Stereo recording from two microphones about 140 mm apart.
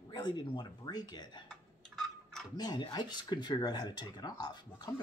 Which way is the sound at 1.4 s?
5° left (ahead or behind).